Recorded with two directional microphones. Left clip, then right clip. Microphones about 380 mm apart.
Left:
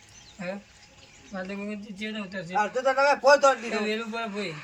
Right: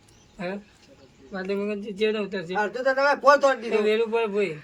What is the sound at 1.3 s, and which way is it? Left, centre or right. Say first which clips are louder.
Speech: right 7 dB; centre.